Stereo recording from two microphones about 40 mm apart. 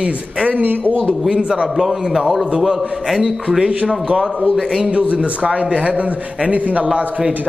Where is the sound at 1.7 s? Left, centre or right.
Centre.